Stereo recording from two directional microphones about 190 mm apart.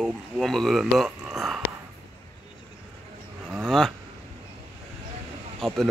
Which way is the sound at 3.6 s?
Centre (ahead or behind).